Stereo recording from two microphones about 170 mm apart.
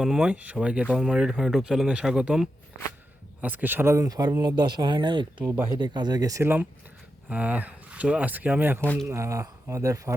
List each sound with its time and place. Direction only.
0.0 s speech: 5° right (ahead or behind); by 5.2 s 25° right (ahead or behind)
5.5 s speech: 15° right (ahead or behind)
5.7 s speech: 25° right (ahead or behind)
8.8 s speech: 10° left (ahead or behind)
9.0 s speech: 15° right (ahead or behind)